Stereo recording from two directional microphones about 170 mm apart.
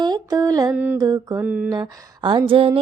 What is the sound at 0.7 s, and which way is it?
Mantra, 10° right (ahead or behind).